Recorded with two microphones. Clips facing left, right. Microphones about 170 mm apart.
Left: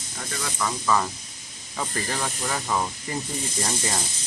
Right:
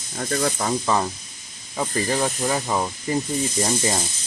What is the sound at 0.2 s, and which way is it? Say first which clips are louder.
Speech: right 7 dB; 50° right (ahead or behind).